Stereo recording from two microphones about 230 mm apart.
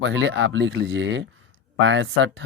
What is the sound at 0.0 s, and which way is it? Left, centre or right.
Speech, right.